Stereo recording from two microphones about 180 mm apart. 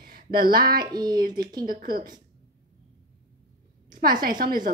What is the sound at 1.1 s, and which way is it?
A woman's voice, 55° right (ahead or behind).